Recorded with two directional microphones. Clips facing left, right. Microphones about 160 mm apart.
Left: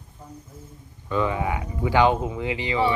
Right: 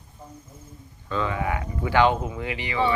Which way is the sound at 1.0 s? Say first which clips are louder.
Left 2 dB; 15° left (ahead or behind).